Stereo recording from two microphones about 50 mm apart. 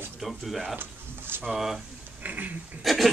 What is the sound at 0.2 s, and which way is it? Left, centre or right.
Speech, centre.